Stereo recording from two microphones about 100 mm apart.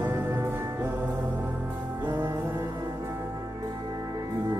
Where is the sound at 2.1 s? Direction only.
25° right (ahead or behind).